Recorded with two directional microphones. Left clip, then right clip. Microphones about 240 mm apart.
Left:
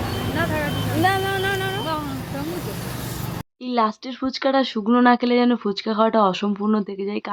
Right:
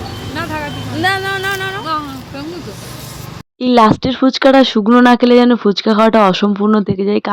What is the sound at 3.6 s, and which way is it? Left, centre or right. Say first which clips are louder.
Speech: right 12 dB; right.